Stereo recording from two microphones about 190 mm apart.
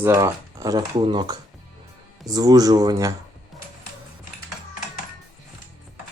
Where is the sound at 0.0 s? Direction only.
15° right (ahead or behind).